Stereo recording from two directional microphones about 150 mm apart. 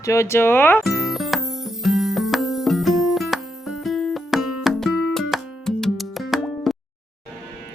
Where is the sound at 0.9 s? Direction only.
Centre (ahead or behind).